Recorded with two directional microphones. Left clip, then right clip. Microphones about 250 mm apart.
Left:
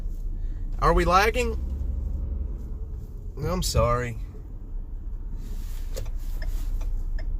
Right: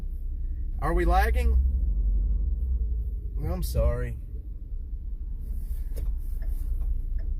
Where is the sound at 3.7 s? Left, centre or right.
Left.